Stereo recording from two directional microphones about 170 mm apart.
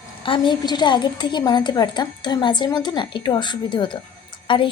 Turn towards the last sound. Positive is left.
turn(degrees=30)  # may be behind; listen again after turning